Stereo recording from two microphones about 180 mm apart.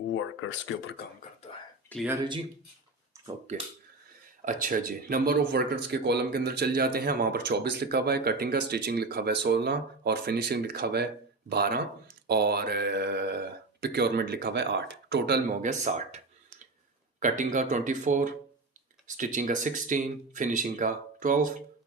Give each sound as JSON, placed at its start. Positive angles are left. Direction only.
{"t": 0.1, "sound": "speech", "side_deg": 90}
{"t": 1.9, "sound": "speech", "side_deg": 10}
{"t": 3.5, "sound": "speech", "side_deg": -40}
{"t": 15.6, "sound": "speech", "side_deg": -45}